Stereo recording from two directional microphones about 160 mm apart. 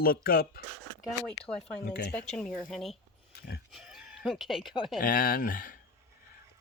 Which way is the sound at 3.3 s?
75° left (ahead or behind).